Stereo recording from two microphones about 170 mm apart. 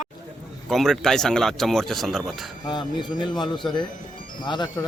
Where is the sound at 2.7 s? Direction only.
25° left (ahead or behind).